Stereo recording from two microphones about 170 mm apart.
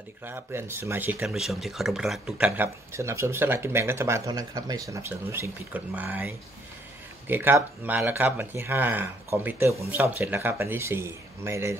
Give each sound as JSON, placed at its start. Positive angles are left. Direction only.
{"t": 0.2, "sound": "speech", "side_deg": -10}